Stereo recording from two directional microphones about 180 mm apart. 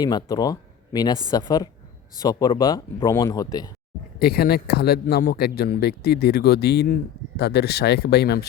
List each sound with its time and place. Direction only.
0.0 s speech: 20° left (ahead or behind)
4.2 s speech: 60° left (ahead or behind)